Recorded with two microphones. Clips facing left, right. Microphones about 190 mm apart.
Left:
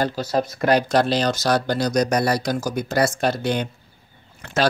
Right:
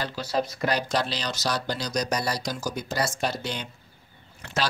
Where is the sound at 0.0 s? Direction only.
45° left (ahead or behind).